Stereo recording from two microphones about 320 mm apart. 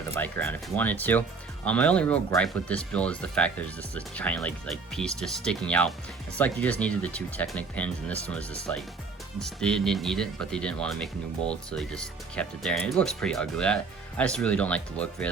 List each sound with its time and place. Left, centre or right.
0.1 s speech: centre